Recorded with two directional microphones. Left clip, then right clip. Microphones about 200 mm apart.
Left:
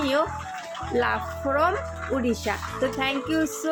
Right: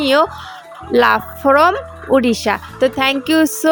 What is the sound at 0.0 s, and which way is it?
A woman's voice, 50° right (ahead or behind).